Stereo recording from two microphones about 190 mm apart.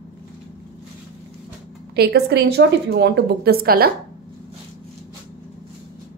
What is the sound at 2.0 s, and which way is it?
A woman's voice, 55° right (ahead or behind).